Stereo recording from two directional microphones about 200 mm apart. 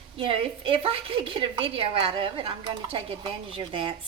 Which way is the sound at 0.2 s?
25° right (ahead or behind).